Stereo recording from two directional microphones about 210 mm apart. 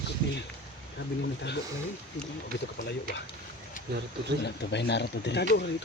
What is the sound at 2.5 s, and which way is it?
Speech, 60° left (ahead or behind).